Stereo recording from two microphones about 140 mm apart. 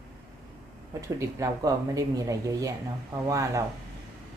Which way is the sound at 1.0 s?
25° right (ahead or behind).